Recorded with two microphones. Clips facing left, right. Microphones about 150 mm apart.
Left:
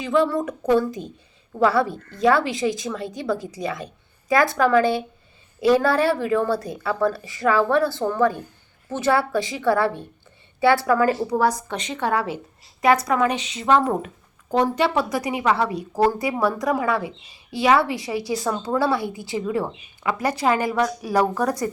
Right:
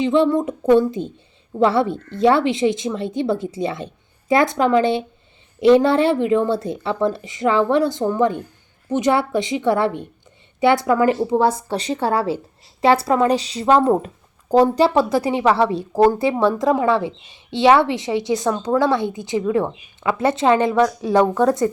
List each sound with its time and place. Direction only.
0.0 s a woman's voice: 25° right (ahead or behind)
18.3 s speech: 5° left (ahead or behind)
18.8 s a woman's voice: 20° right (ahead or behind)